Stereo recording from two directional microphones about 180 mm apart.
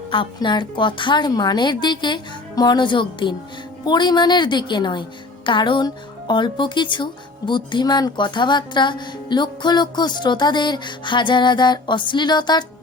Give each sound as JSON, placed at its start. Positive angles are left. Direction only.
{"t": 0.1, "sound": "speech", "side_deg": 25}